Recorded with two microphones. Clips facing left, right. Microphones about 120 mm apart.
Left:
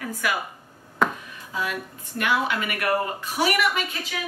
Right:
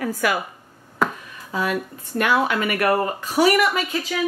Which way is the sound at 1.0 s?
5° right (ahead or behind).